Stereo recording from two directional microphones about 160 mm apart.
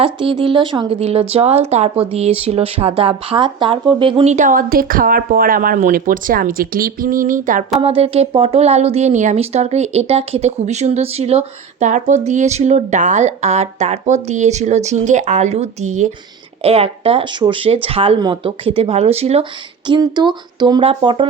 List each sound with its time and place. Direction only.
0.0 s speech: 35° right (ahead or behind); by 7.6 s 55° right (ahead or behind)
7.8 s a woman's voice: 35° right (ahead or behind)
19.9 s speech: 25° right (ahead or behind)